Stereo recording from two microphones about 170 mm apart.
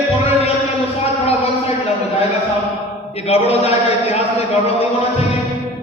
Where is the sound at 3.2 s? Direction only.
35° left (ahead or behind).